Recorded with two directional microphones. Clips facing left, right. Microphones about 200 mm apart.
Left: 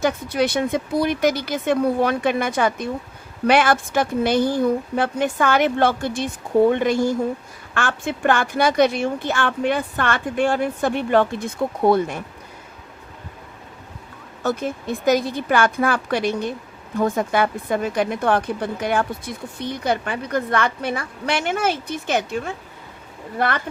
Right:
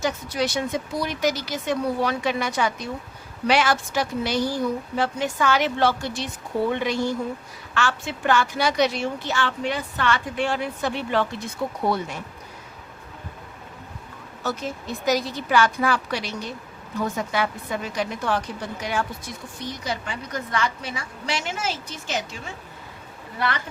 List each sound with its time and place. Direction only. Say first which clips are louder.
0.0 s a woman's voice: left 5 dB; 60° left (ahead or behind)
14.4 s a woman's voice: left 6 dB; 55° left (ahead or behind)